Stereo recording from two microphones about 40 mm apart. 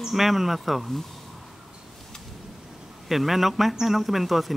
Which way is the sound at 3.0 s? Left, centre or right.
Centre.